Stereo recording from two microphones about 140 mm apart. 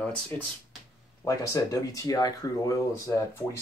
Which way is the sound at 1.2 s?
25° left (ahead or behind).